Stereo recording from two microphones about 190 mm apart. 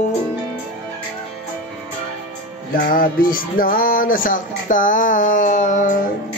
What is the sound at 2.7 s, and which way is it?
Music, 50° left (ahead or behind).